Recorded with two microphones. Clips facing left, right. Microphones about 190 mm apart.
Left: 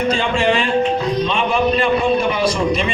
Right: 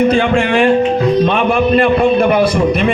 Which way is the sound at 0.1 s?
60° right (ahead or behind).